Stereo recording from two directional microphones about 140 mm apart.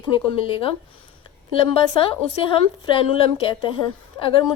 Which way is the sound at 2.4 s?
40° left (ahead or behind).